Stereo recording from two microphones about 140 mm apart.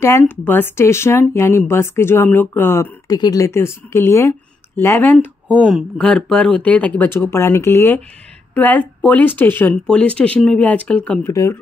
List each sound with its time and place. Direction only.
0.0 s speech: 15° left (ahead or behind)
3.1 s a woman's voice: 25° left (ahead or behind)
5.6 s speech: 5° right (ahead or behind)